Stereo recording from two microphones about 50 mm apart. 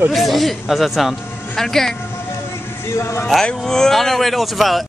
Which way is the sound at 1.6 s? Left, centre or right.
Centre.